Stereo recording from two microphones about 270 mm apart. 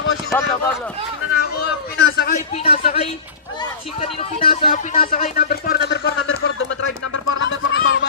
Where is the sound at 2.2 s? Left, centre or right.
Left.